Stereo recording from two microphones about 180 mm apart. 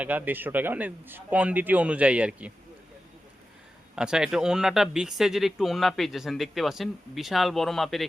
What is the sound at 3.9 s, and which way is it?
Speech, 5° right (ahead or behind).